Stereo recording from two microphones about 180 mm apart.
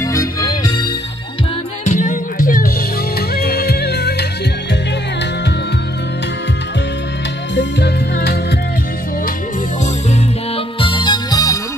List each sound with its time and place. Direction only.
0.0 s music: 20° left (ahead or behind)
1.9 s music: 45° left (ahead or behind)
3.2 s music: 60° left (ahead or behind)
7.5 s music: 70° left (ahead or behind)
10.8 s music: 25° left (ahead or behind)